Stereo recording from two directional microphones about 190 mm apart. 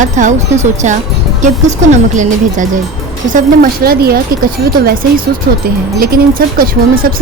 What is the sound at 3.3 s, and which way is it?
Speech, 45° right (ahead or behind).